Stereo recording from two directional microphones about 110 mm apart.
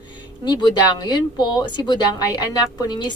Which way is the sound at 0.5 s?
40° left (ahead or behind).